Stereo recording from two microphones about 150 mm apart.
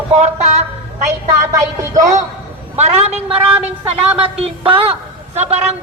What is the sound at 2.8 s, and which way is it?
Speech, 45° right (ahead or behind).